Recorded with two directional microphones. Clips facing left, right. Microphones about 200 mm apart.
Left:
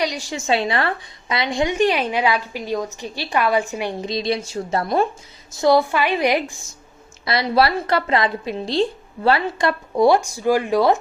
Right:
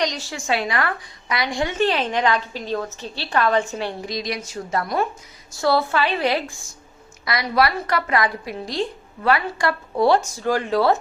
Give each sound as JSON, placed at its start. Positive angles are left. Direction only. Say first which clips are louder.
{"t": 0.0, "sound": "a woman's voice", "louder": "left 1 dB", "side_deg": 10}
{"t": 4.1, "sound": "a woman's voice", "louder": "left 5 dB", "side_deg": 25}
{"t": 5.5, "sound": "a woman's voice", "louder": "left 3 dB", "side_deg": 15}
{"t": 7.3, "sound": "a woman's voice", "louder": "left 3 dB", "side_deg": 30}